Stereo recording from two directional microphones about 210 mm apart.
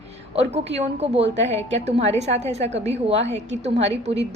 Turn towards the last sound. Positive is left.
turn(degrees=-30)  # may be behind; listen again after turning